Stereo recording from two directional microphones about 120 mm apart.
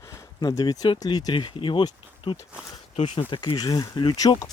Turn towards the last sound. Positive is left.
turn(degrees=30)  # may be behind; listen again after turning